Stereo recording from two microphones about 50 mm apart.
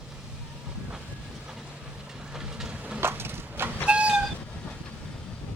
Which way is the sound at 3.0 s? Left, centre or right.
Right.